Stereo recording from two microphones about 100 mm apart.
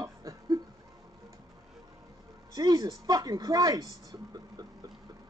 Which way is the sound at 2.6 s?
35° right (ahead or behind).